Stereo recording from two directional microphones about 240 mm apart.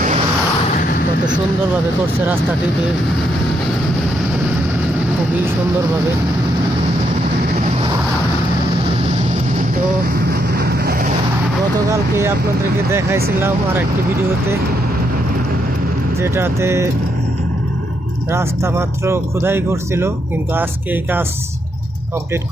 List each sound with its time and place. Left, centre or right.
10.5 s vehicle: right
11.9 s speech: centre
16.2 s speech: centre
18.3 s speech: centre